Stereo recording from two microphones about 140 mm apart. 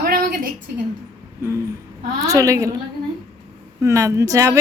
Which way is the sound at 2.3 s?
25° right (ahead or behind).